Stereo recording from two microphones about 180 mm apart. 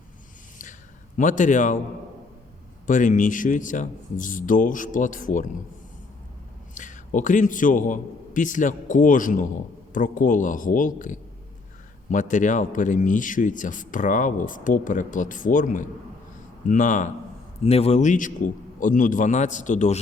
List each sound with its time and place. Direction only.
0.6 s a sound: 45° left (ahead or behind)
2.8 s a man's voice: 45° left (ahead or behind)
6.7 s a man's voice: 45° left (ahead or behind)
17.6 s a man's voice: 35° left (ahead or behind)